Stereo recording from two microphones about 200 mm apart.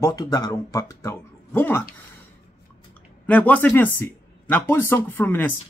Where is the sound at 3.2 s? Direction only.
10° left (ahead or behind).